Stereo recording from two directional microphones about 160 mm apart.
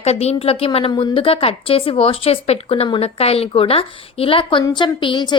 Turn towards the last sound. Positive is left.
turn(degrees=30)  # may be behind; listen again after turning